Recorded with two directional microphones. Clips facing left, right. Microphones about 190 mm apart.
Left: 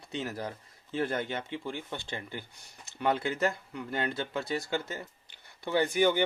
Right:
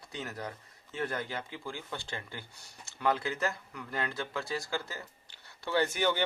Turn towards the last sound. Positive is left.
turn(degrees=15)  # may be behind; listen again after turning